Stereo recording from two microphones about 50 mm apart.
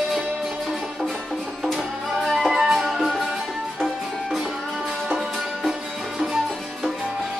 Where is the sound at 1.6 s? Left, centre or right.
Centre.